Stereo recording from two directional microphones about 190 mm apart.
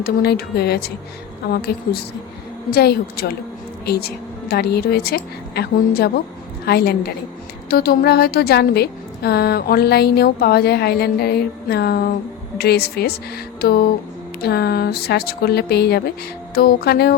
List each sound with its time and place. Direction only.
0.0 s a woman's voice: 55° left (ahead or behind)